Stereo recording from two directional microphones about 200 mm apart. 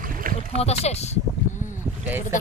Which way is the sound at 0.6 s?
30° left (ahead or behind).